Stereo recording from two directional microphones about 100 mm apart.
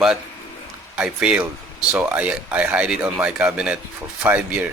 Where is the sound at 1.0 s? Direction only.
10° right (ahead or behind).